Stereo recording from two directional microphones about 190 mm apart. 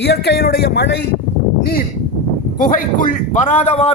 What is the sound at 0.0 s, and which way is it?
Speech, 60° left (ahead or behind).